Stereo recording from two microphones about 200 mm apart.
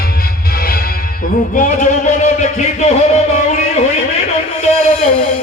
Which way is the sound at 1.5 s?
40° left (ahead or behind).